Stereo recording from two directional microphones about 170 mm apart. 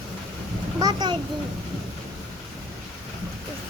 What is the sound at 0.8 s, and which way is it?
Speech, 25° right (ahead or behind).